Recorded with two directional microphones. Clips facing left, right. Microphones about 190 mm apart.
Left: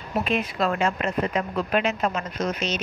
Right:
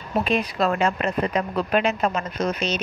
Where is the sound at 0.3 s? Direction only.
40° right (ahead or behind).